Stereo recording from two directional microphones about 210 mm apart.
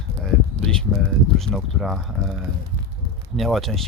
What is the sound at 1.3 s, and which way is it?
Speech, centre (ahead or behind).